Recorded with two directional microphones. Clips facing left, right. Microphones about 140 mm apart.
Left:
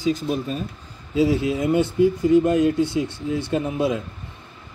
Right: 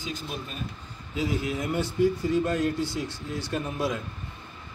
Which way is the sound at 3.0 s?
60° left (ahead or behind).